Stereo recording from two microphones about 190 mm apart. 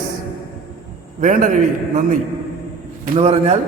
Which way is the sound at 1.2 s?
45° right (ahead or behind).